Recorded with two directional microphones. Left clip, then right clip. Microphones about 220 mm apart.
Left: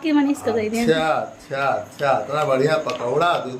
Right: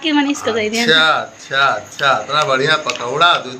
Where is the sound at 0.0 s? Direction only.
Centre (ahead or behind).